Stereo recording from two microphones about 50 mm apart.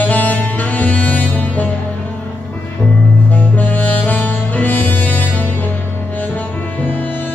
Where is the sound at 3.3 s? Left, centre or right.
Left.